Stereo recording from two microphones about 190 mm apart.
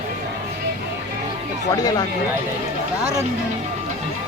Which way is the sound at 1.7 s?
20° left (ahead or behind).